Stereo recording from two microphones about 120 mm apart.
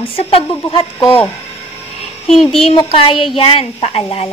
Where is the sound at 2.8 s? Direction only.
45° left (ahead or behind).